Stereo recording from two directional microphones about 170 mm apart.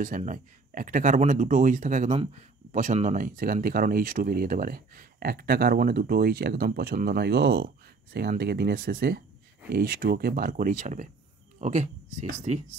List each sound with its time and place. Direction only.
0.0 s speech: 50° right (ahead or behind)